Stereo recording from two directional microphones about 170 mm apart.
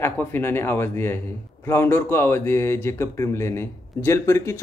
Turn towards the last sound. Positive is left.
turn(degrees=15)  # may be behind; listen again after turning